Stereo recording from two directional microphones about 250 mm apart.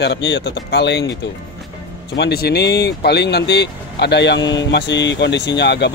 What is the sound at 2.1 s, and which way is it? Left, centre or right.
Speech, left.